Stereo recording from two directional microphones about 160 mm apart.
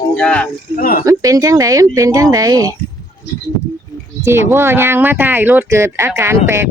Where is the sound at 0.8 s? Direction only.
65° left (ahead or behind).